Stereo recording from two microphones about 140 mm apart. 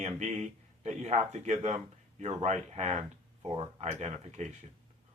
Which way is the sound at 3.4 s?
40° right (ahead or behind).